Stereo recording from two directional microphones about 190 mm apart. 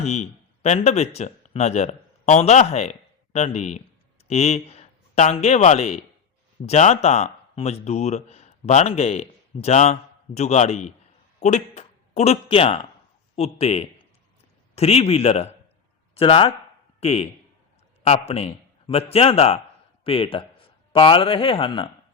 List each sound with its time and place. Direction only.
0.0 s a man's voice: 35° left (ahead or behind)